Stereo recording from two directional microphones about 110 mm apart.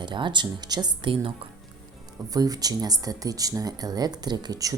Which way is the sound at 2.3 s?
35° right (ahead or behind).